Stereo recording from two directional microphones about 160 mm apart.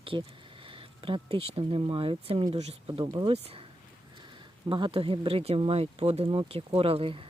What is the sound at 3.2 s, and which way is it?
Speech, 25° right (ahead or behind).